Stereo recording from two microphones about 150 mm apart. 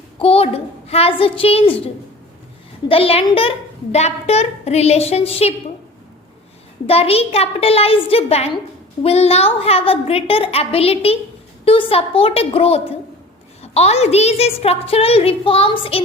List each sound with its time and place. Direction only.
0.2 s a woman's voice: 40° left (ahead or behind)
2.9 s a woman's voice: 40° left (ahead or behind)
6.8 s a woman's voice: 40° left (ahead or behind)